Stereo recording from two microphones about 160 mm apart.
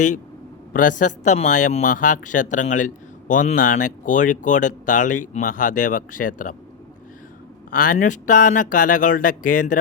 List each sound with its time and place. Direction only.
0.7 s a man's voice: 55° left (ahead or behind)
7.7 s speech: 60° left (ahead or behind)